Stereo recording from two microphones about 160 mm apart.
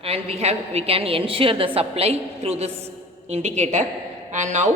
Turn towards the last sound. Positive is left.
turn(degrees=-50)  # may be behind; listen again after turning